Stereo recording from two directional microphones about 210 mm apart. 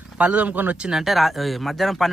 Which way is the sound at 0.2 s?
5° right (ahead or behind).